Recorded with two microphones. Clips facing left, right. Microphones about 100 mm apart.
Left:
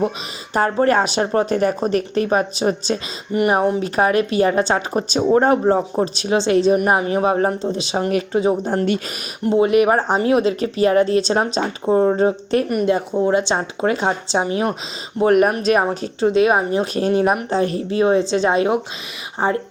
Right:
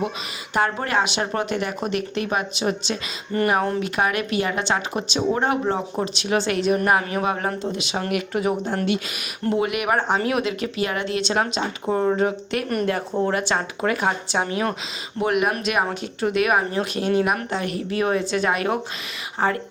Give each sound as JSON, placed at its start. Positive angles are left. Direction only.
{"t": 0.5, "sound": "a woman's voice", "side_deg": 35}
{"t": 3.3, "sound": "speech", "side_deg": 15}
{"t": 3.8, "sound": "a woman's voice", "side_deg": 35}
{"t": 6.0, "sound": "a woman's voice", "side_deg": 30}
{"t": 8.6, "sound": "a woman's voice", "side_deg": 40}
{"t": 9.4, "sound": "a woman's voice", "side_deg": 25}
{"t": 15.2, "sound": "a woman's voice", "side_deg": 40}